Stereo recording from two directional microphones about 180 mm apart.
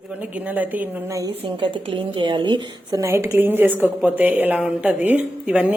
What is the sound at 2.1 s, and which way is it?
A woman's voice, 25° right (ahead or behind).